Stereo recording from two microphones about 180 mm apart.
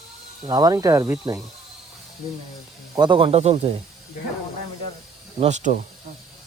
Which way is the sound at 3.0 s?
25° right (ahead or behind).